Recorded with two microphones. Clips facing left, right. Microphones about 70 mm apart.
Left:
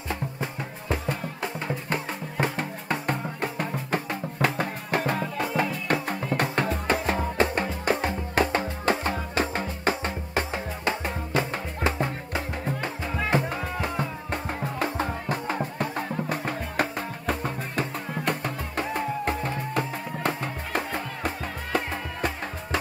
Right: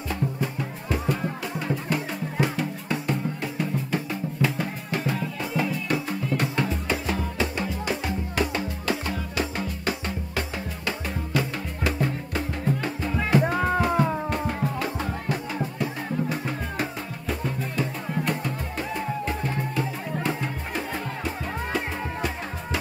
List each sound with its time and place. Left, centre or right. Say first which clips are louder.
0.1 s music: right 3 dB; left
13.4 s music: right 7 dB; right
14.3 s music: right 3 dB; left